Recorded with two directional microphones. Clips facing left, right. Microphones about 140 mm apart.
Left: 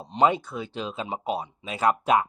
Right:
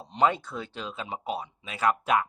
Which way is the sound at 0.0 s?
20° left (ahead or behind).